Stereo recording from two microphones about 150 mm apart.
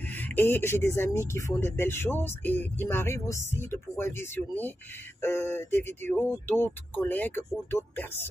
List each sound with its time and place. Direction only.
0.1 s speech: 10° left (ahead or behind)